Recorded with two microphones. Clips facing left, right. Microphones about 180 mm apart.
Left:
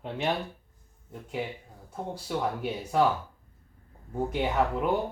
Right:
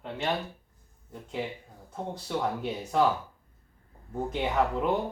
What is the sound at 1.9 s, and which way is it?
Speech, 5° left (ahead or behind).